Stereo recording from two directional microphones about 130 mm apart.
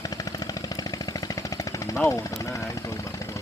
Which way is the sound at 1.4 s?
25° left (ahead or behind).